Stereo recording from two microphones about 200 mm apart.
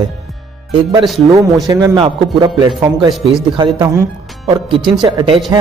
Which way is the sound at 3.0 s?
Centre (ahead or behind).